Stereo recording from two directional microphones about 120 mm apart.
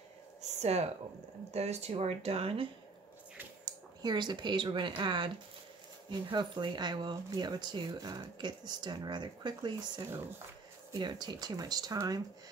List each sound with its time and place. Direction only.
0.4 s a sound: 65° right (ahead or behind)
1.5 s speech: 65° right (ahead or behind)
3.6 s speech: 35° right (ahead or behind)